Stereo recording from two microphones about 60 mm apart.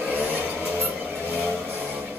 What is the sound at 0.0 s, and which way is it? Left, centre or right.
Vehicle, right.